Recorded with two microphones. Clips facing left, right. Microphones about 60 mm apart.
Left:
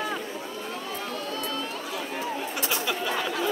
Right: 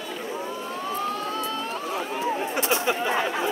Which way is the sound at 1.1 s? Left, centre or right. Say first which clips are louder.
Right 3 dB; right.